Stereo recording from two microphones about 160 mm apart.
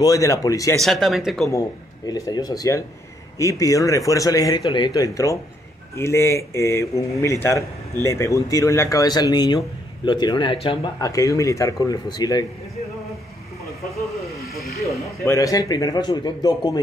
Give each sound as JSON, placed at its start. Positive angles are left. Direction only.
{"t": 0.0, "sound": "speech", "side_deg": 20}
{"t": 0.7, "sound": "speech", "side_deg": 0}
{"t": 2.0, "sound": "speech", "side_deg": 25}
{"t": 11.0, "sound": "speech", "side_deg": 20}
{"t": 14.9, "sound": "speech", "side_deg": 20}